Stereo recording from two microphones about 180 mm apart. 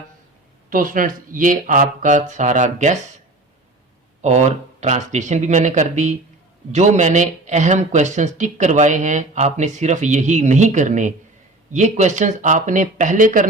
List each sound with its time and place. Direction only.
0.7 s speech: 50° right (ahead or behind)
4.2 s speech: 40° right (ahead or behind)